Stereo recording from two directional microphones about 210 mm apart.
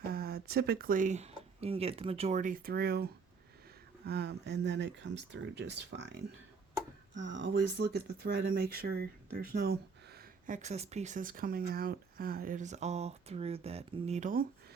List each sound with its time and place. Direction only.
0.0 s speech: 45° right (ahead or behind)
7.2 s speech: 60° right (ahead or behind); by 14.4 s 35° right (ahead or behind)